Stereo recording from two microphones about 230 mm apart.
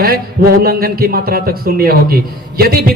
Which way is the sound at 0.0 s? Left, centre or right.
Right.